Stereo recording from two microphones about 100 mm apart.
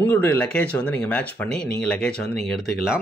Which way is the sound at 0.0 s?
20° left (ahead or behind).